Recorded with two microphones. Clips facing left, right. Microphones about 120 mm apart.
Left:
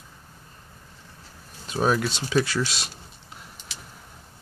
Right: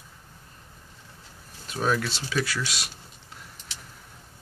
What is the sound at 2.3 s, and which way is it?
Speech, 30° left (ahead or behind).